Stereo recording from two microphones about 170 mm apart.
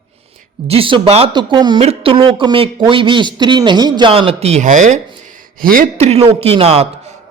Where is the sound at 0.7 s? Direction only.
30° right (ahead or behind); by 4.9 s 45° right (ahead or behind).